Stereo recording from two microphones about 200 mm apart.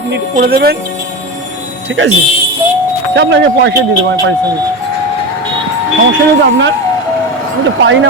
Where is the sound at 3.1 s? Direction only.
60° right (ahead or behind).